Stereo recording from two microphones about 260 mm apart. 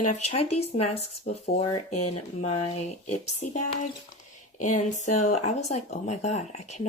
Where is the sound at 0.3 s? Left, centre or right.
Left.